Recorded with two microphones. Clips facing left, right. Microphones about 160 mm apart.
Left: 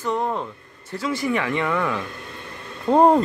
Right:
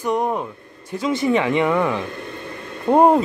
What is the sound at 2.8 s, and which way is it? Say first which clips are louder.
Speech: right 1 dB; 10° right (ahead or behind).